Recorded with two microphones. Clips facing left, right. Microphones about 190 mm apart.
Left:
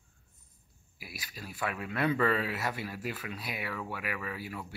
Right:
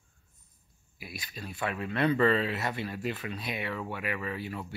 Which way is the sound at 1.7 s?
10° left (ahead or behind).